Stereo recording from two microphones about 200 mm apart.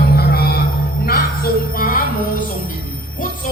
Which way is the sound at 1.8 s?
45° left (ahead or behind).